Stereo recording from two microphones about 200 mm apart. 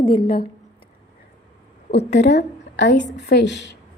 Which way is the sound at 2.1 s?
60° left (ahead or behind).